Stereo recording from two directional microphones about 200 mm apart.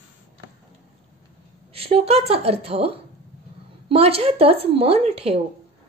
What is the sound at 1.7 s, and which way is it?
A woman's voice, 30° right (ahead or behind).